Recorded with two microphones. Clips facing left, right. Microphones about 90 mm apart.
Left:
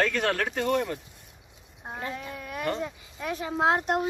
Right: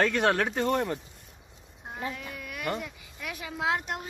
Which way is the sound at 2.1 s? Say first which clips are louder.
Left 4 dB; 30° left (ahead or behind).